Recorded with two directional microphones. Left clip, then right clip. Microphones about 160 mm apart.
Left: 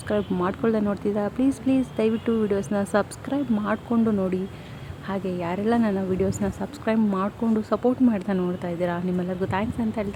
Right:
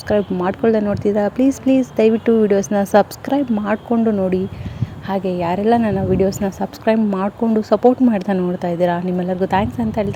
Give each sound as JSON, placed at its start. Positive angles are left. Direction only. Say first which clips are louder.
{"t": 0.1, "sound": "a woman's voice", "louder": "right 7 dB", "side_deg": -20}